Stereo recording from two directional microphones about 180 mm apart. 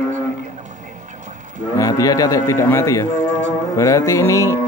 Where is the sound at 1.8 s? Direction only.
20° left (ahead or behind).